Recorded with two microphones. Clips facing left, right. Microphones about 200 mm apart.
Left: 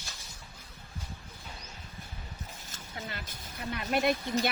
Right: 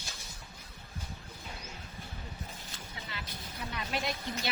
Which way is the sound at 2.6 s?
45° left (ahead or behind).